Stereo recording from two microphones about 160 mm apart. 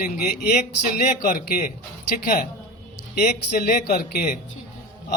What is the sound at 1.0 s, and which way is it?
Speech, 55° left (ahead or behind).